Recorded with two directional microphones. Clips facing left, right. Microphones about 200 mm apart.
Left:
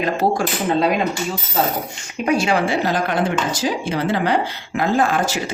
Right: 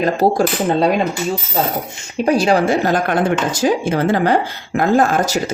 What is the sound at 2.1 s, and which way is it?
Speech, 35° right (ahead or behind).